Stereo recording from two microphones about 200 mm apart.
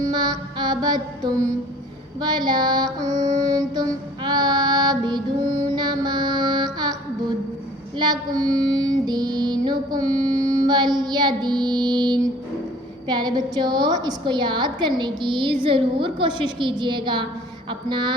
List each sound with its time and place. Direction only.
0.0 s mantra: 20° right (ahead or behind)
2.2 s music: 20° right (ahead or behind)
7.9 s a woman's voice: 20° right (ahead or behind)
10.7 s music: 20° right (ahead or behind)
13.1 s a woman's voice: 20° right (ahead or behind)